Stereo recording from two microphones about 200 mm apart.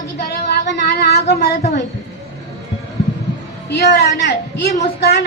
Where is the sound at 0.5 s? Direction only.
55° left (ahead or behind).